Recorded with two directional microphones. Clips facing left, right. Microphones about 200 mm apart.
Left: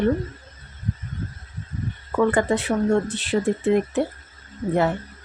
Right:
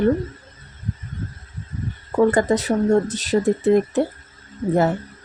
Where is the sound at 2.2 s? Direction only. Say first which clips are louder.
Right 3 dB; 40° right (ahead or behind).